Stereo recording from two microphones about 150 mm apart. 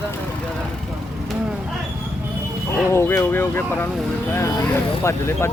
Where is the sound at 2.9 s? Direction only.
15° left (ahead or behind).